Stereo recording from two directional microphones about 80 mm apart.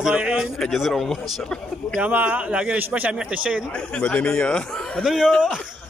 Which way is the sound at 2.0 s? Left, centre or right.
Right.